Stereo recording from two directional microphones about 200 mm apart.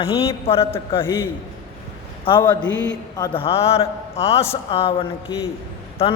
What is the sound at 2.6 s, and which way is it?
Speech, 65° left (ahead or behind).